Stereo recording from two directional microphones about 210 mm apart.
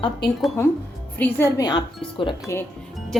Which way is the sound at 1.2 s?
10° left (ahead or behind).